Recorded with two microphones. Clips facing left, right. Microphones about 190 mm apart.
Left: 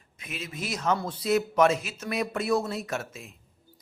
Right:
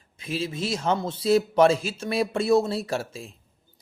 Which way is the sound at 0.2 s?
30° right (ahead or behind).